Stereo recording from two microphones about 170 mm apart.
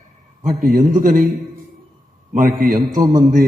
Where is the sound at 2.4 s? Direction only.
55° right (ahead or behind).